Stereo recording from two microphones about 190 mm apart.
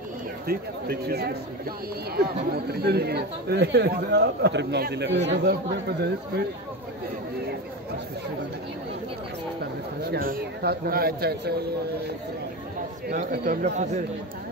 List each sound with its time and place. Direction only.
0.5 s speech: 55° right (ahead or behind)
9.6 s speech: 55° right (ahead or behind)
13.1 s speech: 50° right (ahead or behind)